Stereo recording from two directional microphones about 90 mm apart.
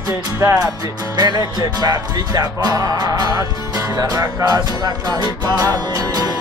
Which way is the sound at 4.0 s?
40° right (ahead or behind).